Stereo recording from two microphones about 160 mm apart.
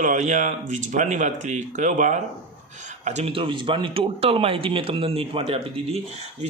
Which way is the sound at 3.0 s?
40° right (ahead or behind).